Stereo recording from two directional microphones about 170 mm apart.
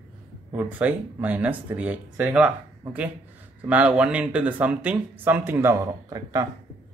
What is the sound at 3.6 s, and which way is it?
A man's voice, 10° right (ahead or behind).